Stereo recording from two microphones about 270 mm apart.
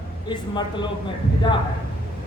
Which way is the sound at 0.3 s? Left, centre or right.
Centre.